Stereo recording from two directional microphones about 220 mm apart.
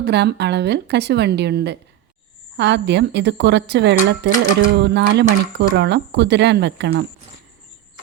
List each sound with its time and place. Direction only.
0.0 s speech: 50° right (ahead or behind)